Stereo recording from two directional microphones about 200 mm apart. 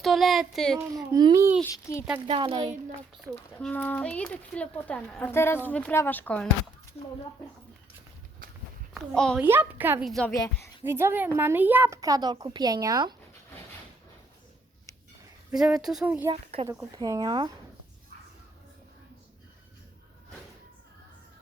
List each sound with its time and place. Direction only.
0.0 s speech: centre (ahead or behind)
1.1 s a child's voice: 20° right (ahead or behind)
1.7 s speech: 15° left (ahead or behind)
2.2 s speech: 25° right (ahead or behind)
3.2 s speech: 5° left (ahead or behind)
8.4 s walk: 45° right (ahead or behind)
9.1 s speech: 5° left (ahead or behind)
9.4 s a child's voice: 10° right (ahead or behind)
10.1 s speech: centre (ahead or behind)
10.3 s speech: 20° left (ahead or behind)
10.8 s a child's voice: 10° right (ahead or behind)
15.5 s speech: 5° right (ahead or behind)
16.3 s speech: 30° right (ahead or behind)